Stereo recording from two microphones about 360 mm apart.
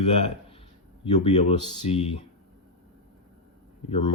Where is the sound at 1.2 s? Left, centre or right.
Centre.